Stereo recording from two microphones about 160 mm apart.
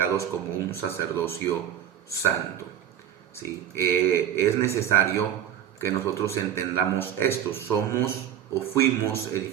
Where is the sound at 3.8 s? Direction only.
15° left (ahead or behind).